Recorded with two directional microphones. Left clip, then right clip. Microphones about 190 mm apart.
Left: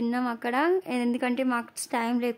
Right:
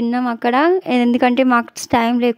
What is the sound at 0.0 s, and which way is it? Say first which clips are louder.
A woman's voice: right 10 dB; 30° right (ahead or behind).